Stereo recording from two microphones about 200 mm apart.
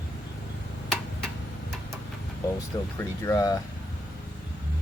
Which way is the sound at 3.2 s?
15° left (ahead or behind).